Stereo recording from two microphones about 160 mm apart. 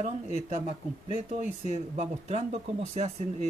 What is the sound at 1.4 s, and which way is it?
Speech, 45° right (ahead or behind).